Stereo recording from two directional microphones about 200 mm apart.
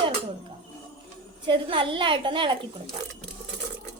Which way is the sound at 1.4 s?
25° right (ahead or behind).